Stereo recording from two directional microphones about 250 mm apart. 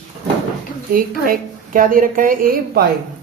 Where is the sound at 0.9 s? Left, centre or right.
Right.